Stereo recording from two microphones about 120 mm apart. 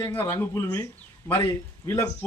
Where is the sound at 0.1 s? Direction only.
20° left (ahead or behind).